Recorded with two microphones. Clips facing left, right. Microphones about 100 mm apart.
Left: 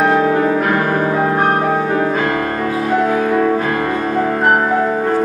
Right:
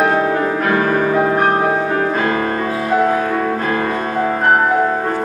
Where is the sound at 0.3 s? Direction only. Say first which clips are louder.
Left 3 dB; 20° left (ahead or behind).